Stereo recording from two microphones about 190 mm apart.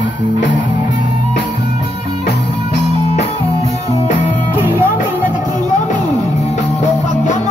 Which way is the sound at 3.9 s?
40° left (ahead or behind).